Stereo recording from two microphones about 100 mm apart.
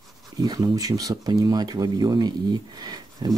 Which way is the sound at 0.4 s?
40° right (ahead or behind).